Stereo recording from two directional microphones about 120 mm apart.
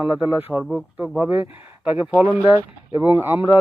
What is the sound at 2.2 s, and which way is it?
Speech, 25° right (ahead or behind).